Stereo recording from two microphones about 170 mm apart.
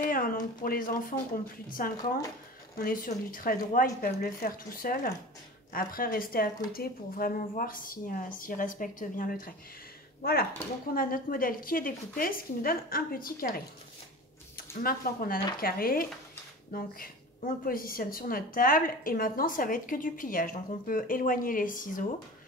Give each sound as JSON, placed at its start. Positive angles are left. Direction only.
{"t": 0.0, "sound": "a woman's voice", "side_deg": 55}
{"t": 11.0, "sound": "a woman's voice", "side_deg": 55}
{"t": 14.8, "sound": "a woman's voice", "side_deg": 60}